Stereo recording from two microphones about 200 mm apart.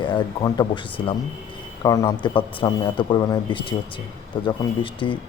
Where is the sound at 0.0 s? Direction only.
20° left (ahead or behind).